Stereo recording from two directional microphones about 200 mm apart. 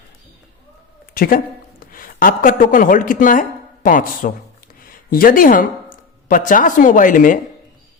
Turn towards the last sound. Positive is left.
turn(degrees=40)  # may be behind; listen again after turning